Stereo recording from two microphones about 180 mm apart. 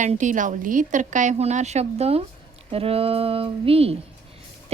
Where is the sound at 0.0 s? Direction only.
45° right (ahead or behind).